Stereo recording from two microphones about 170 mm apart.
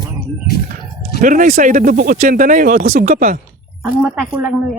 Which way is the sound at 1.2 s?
50° right (ahead or behind).